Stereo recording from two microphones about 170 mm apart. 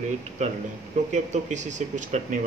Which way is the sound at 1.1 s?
45° right (ahead or behind).